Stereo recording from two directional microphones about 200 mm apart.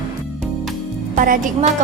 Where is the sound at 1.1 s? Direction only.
40° right (ahead or behind).